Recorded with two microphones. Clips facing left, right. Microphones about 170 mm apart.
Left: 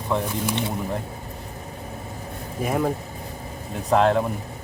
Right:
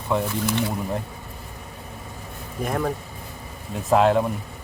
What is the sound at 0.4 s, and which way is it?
Speech, 20° left (ahead or behind).